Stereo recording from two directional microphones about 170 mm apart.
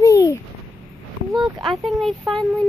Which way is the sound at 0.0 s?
20° left (ahead or behind).